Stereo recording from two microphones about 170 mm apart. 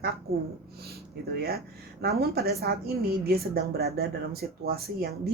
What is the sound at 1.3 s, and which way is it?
A woman's voice, 65° right (ahead or behind).